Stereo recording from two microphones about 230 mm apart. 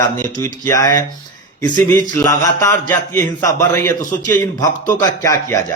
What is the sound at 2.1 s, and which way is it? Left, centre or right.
A man's voice, centre.